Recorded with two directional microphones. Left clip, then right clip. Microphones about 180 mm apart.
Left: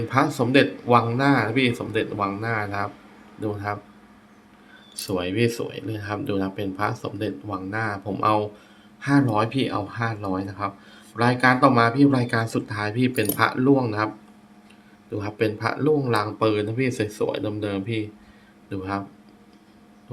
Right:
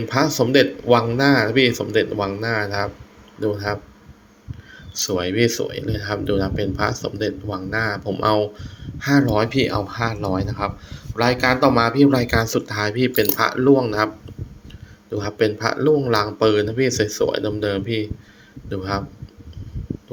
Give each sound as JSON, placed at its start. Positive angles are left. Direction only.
{"t": 0.1, "sound": "speech", "side_deg": -15}
{"t": 4.9, "sound": "speech", "side_deg": -15}
{"t": 15.1, "sound": "speech", "side_deg": -15}